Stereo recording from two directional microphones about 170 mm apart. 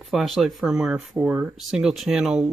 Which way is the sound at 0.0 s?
Centre (ahead or behind).